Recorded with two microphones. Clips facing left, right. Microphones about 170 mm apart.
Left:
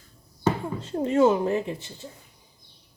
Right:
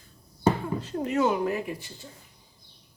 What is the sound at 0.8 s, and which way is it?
Speech, 25° left (ahead or behind).